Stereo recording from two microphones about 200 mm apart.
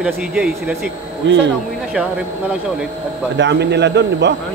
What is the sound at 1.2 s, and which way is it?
Speech, 65° right (ahead or behind).